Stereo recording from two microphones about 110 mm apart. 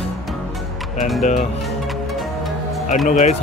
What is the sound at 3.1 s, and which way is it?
Speech, 90° left.